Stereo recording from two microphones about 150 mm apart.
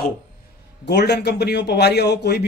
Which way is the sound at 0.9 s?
90° left.